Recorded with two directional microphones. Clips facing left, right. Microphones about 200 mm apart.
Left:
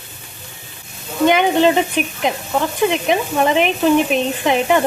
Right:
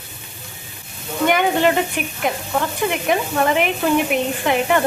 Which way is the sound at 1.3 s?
20° left (ahead or behind).